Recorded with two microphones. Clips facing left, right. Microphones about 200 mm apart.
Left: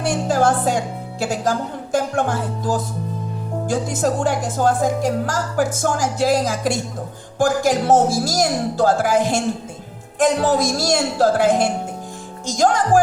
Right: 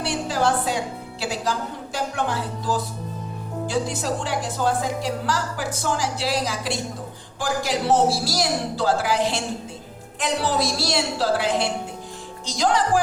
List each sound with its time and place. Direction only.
0.0 s music: 45° left (ahead or behind)
1.2 s a woman's voice: 45° left (ahead or behind)